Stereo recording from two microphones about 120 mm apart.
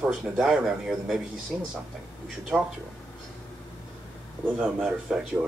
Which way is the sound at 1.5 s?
15° right (ahead or behind).